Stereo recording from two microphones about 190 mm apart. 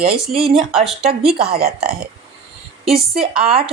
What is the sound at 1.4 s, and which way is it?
Speech, 55° right (ahead or behind).